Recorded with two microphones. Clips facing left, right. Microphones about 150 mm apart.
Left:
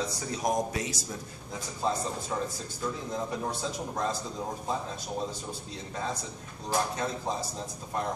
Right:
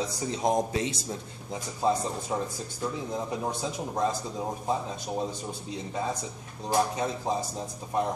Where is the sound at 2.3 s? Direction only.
20° right (ahead or behind).